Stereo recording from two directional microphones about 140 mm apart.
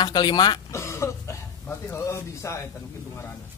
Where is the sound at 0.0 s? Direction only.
30° left (ahead or behind).